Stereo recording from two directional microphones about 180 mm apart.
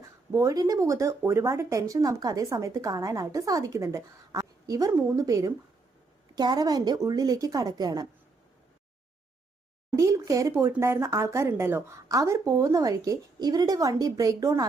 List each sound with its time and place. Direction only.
0.0 s a woman's voice: 15° right (ahead or behind)
9.9 s speech: 15° right (ahead or behind)